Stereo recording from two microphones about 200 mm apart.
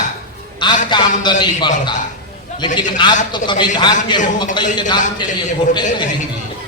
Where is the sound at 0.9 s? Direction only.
20° left (ahead or behind).